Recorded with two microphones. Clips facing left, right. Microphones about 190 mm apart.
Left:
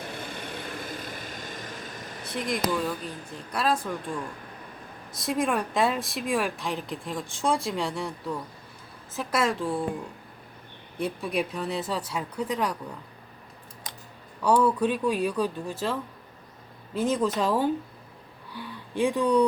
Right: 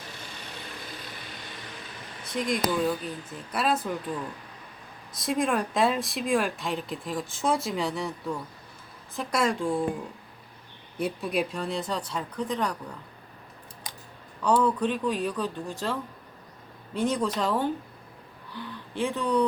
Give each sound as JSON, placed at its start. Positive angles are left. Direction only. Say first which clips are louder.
{"t": 0.0, "sound": "vehicle", "louder": "left 7 dB", "side_deg": 55}
{"t": 2.2, "sound": "speech", "louder": "right 1 dB", "side_deg": 0}
{"t": 11.0, "sound": "speech", "louder": "even", "side_deg": 0}
{"t": 14.4, "sound": "speech", "louder": "left 2 dB", "side_deg": 10}